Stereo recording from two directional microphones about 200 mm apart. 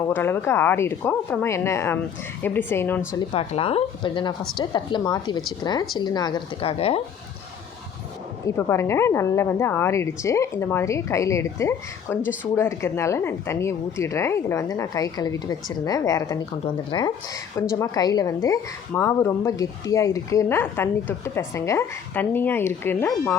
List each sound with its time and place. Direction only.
0.1 s a woman's voice: 10° left (ahead or behind)
3.3 s a woman's voice: 30° left (ahead or behind)
8.4 s a woman's voice: 15° left (ahead or behind)